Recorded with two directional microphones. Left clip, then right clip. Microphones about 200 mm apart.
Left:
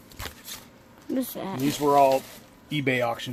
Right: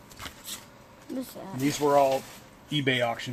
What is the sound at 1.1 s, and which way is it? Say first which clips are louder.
Speech: left 6 dB; 35° left (ahead or behind).